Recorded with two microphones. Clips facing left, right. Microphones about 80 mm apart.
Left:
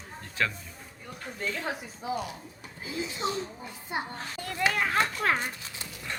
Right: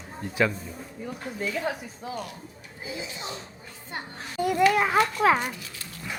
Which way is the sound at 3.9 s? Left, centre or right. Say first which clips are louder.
Left 4 dB; centre.